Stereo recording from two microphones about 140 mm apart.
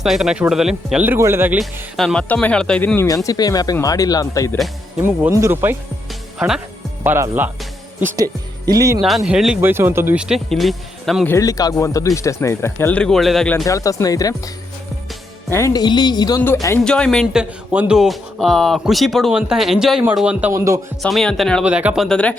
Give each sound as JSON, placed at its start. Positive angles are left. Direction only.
{"t": 0.0, "sound": "speech", "side_deg": 0}
{"t": 1.5, "sound": "speech", "side_deg": 0}
{"t": 5.3, "sound": "speech", "side_deg": -20}
{"t": 7.0, "sound": "speech", "side_deg": -15}
{"t": 9.0, "sound": "speech", "side_deg": 0}
{"t": 9.6, "sound": "speech", "side_deg": -15}
{"t": 11.3, "sound": "speech", "side_deg": 25}
{"t": 13.7, "sound": "speech", "side_deg": 25}
{"t": 16.8, "sound": "speech", "side_deg": 5}
{"t": 17.3, "sound": "speech", "side_deg": -10}
{"t": 21.0, "sound": "speech", "side_deg": 5}
{"t": 21.6, "sound": "speech", "side_deg": -10}
{"t": 22.0, "sound": "speech", "side_deg": 5}